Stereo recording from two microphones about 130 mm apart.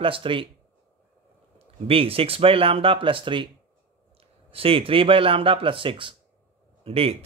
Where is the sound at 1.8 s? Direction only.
45° right (ahead or behind).